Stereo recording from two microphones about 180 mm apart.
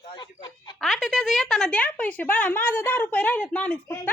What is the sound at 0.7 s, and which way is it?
Speech, centre (ahead or behind).